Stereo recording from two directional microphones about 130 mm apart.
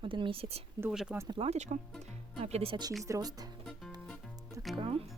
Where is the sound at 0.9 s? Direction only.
5° right (ahead or behind).